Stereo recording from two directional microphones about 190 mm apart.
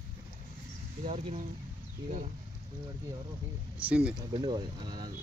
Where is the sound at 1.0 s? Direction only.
40° right (ahead or behind).